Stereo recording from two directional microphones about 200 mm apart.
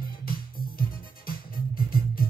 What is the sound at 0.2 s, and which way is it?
Music, 45° left (ahead or behind).